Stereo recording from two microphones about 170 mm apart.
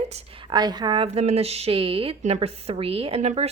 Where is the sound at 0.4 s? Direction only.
25° right (ahead or behind).